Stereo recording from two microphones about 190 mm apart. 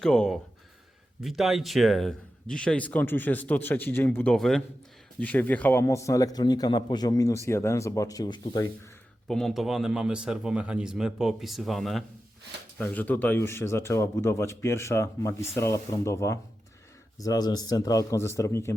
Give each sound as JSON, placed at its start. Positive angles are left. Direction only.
{"t": 0.0, "sound": "a man's voice", "side_deg": 0}
{"t": 9.2, "sound": "a man's voice", "side_deg": 5}